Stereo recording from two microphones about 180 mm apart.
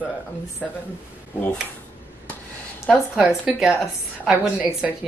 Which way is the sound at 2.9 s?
5° right (ahead or behind).